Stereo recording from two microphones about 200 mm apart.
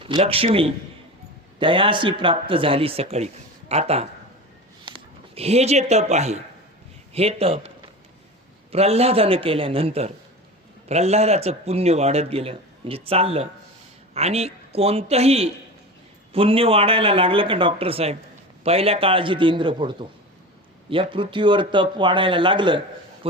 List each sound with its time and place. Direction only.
0.2 s speech: 30° right (ahead or behind)
8.7 s speech: 30° right (ahead or behind)